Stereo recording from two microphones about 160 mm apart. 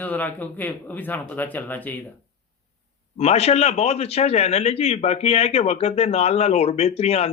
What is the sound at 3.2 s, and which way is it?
A man's voice, 40° left (ahead or behind).